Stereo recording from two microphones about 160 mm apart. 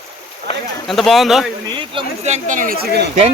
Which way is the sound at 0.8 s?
Centre (ahead or behind).